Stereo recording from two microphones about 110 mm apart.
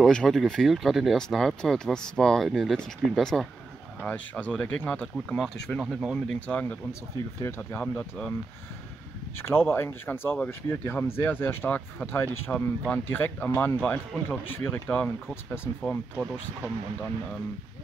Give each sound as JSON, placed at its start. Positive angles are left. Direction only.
{"t": 0.0, "sound": "speech", "side_deg": 5}
{"t": 5.8, "sound": "speech", "side_deg": -5}
{"t": 6.2, "sound": "speech", "side_deg": 10}
{"t": 7.4, "sound": "speech", "side_deg": 25}
{"t": 7.8, "sound": "speech", "side_deg": 10}
{"t": 9.7, "sound": "speech", "side_deg": 20}
{"t": 15.8, "sound": "speech", "side_deg": 5}